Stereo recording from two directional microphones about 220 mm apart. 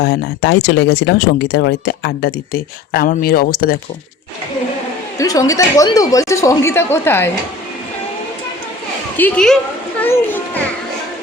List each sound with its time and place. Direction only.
0.0 s speech: 50° left (ahead or behind)
5.1 s a woman's voice: 15° left (ahead or behind)
9.1 s a woman's voice: 5° left (ahead or behind)